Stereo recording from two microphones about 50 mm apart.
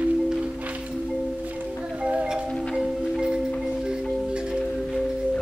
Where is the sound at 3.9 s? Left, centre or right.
Centre.